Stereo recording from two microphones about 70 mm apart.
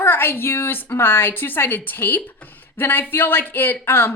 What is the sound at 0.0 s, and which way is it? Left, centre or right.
Speech, left.